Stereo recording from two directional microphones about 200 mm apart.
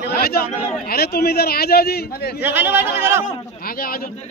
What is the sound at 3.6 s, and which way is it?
Speech, 45° left (ahead or behind).